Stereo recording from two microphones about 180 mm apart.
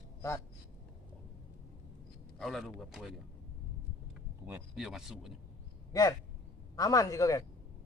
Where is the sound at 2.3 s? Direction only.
Centre (ahead or behind).